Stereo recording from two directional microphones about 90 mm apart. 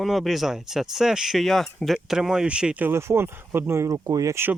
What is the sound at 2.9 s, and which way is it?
Speech, 30° right (ahead or behind).